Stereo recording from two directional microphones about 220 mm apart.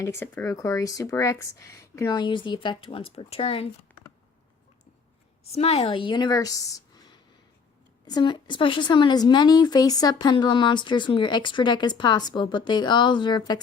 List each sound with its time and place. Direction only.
0.0 s speech: 10° left (ahead or behind); by 3.7 s 25° left (ahead or behind)
5.5 s a woman's voice: 30° left (ahead or behind)